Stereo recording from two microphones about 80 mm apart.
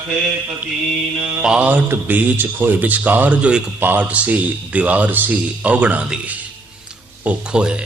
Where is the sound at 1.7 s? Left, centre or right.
Right.